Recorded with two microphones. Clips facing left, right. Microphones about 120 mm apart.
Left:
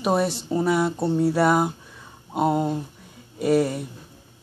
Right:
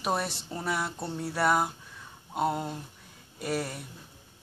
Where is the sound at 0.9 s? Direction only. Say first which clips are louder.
Left 12 dB; 25° left (ahead or behind).